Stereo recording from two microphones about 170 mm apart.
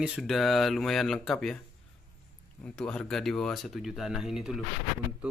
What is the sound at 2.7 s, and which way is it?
Speech, 5° left (ahead or behind).